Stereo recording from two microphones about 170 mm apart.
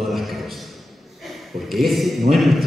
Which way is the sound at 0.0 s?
Centre (ahead or behind).